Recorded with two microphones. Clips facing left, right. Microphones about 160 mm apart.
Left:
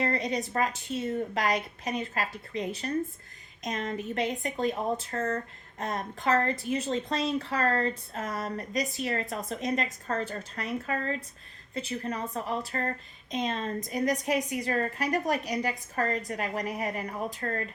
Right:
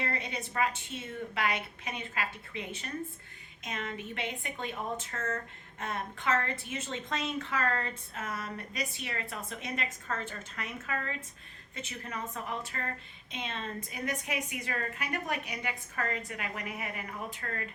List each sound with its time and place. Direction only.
0.0 s a woman's voice: 40° left (ahead or behind)